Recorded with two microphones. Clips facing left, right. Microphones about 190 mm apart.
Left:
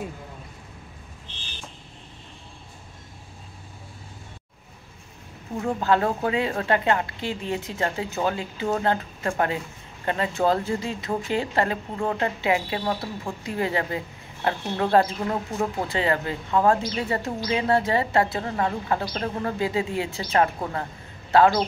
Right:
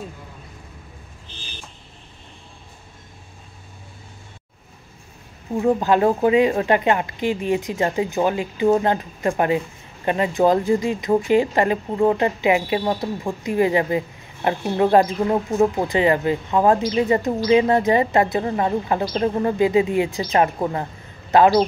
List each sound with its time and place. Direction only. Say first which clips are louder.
5.6 s a woman's voice: right 5 dB; 15° right (ahead or behind)